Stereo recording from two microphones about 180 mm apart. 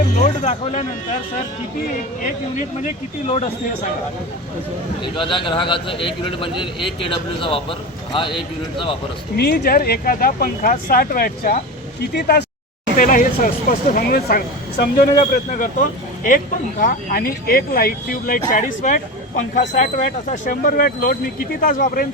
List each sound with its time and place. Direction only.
0.2 s a sound: 45° left (ahead or behind)
0.6 s speech: 40° left (ahead or behind)
2.8 s speech: 40° left (ahead or behind)
5.1 s a man's voice: 25° left (ahead or behind)
9.3 s speech: 60° left (ahead or behind)
13.0 s speech: 50° left (ahead or behind)
16.8 s speech: 50° left (ahead or behind)